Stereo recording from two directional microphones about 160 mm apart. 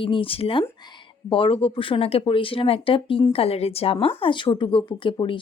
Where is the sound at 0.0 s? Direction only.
35° left (ahead or behind).